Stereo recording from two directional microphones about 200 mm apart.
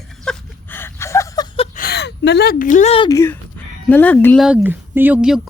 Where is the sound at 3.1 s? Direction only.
15° left (ahead or behind).